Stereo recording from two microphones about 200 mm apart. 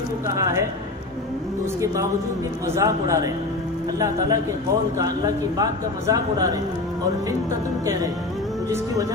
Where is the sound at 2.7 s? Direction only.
15° right (ahead or behind).